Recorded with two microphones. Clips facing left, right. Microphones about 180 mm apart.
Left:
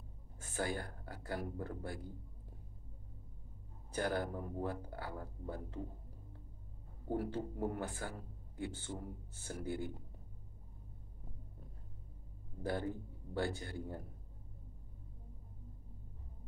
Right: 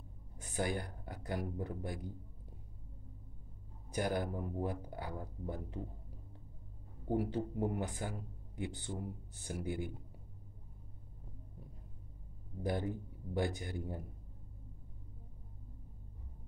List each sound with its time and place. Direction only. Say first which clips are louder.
0.4 s speech: right 2 dB; 15° right (ahead or behind)
3.9 s speech: right 1 dB; 15° right (ahead or behind)
7.1 s speech: right 3 dB; 15° right (ahead or behind)
12.6 s speech: right 1 dB; 15° right (ahead or behind)